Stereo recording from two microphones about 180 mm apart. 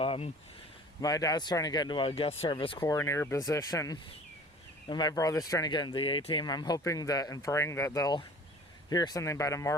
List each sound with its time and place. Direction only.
0.0 s a sound: 30° left (ahead or behind)
1.0 s speech: 20° left (ahead or behind)
2.8 s speech: 15° left (ahead or behind)